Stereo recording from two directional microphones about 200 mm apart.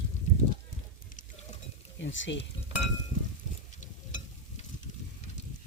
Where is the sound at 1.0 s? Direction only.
45° left (ahead or behind).